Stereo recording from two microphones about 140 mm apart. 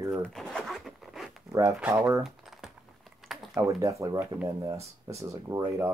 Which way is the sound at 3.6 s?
25° right (ahead or behind).